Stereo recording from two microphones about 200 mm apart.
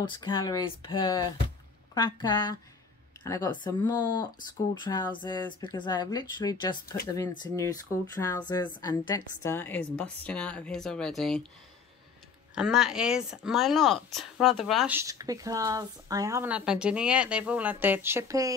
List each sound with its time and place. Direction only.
0.0 s speech: 20° left (ahead or behind); by 11.4 s centre (ahead or behind)
12.5 s speech: 5° right (ahead or behind)
15.0 s a woman's voice: 15° right (ahead or behind)